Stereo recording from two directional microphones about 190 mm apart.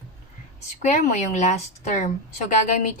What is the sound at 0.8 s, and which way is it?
A woman's voice, 40° left (ahead or behind).